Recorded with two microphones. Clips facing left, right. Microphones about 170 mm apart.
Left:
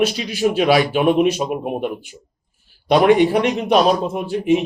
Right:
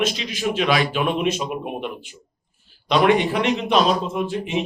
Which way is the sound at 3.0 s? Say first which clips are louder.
Left 4 dB; 40° left (ahead or behind).